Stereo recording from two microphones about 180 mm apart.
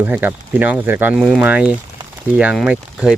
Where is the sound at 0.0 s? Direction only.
10° right (ahead or behind).